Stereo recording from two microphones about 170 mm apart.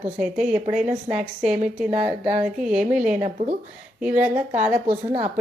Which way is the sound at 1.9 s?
40° right (ahead or behind).